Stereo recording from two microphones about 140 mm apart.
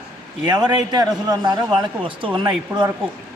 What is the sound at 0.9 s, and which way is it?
A man's voice, 30° right (ahead or behind).